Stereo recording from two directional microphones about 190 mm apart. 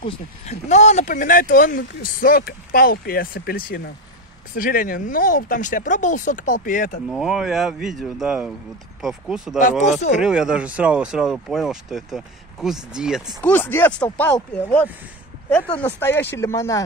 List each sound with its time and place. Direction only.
0.0 s speech: 35° left (ahead or behind)
7.1 s speech: centre (ahead or behind)
9.6 s speech: 40° left (ahead or behind)
10.1 s speech: 5° right (ahead or behind)
13.4 s speech: 10° left (ahead or behind)